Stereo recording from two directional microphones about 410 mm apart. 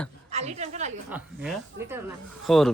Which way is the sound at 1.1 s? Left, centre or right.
Centre.